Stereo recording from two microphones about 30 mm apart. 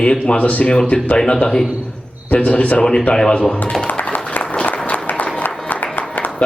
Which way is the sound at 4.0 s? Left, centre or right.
Left.